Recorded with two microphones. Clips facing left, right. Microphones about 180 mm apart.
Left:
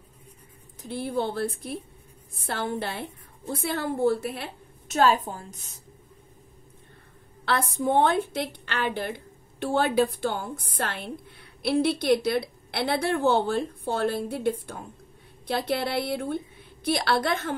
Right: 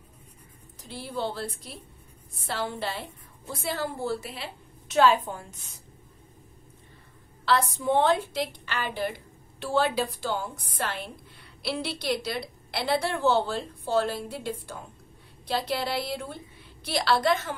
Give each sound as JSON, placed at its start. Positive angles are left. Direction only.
{"t": 0.8, "sound": "a woman's voice", "side_deg": 55}
{"t": 7.4, "sound": "a woman's voice", "side_deg": 50}